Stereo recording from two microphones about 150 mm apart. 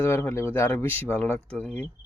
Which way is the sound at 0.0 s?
15° left (ahead or behind).